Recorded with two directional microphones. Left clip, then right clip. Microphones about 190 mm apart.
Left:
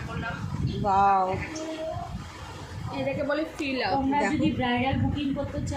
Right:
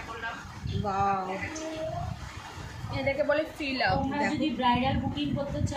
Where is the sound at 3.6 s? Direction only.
65° right (ahead or behind).